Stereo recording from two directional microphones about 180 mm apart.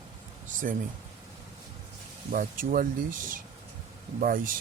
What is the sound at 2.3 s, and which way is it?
Speech, 50° right (ahead or behind).